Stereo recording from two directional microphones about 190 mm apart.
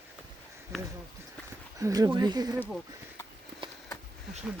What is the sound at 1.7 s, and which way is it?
Speech, 20° right (ahead or behind).